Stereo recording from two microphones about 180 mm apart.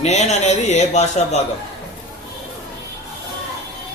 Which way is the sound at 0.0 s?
40° left (ahead or behind).